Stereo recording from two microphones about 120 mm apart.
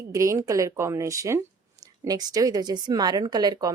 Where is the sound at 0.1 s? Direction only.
25° right (ahead or behind).